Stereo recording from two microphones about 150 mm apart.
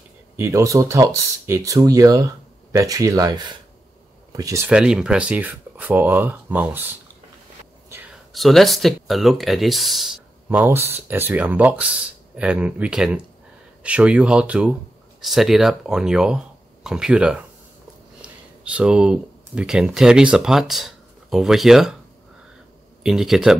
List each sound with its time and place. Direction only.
0.4 s speech: 20° right (ahead or behind)
4.6 s speech: 5° right (ahead or behind)
8.3 s speech: centre (ahead or behind)
23.0 s speech: centre (ahead or behind)